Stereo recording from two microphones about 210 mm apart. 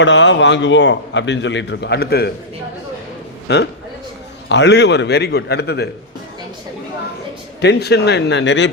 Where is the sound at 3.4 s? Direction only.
55° left (ahead or behind).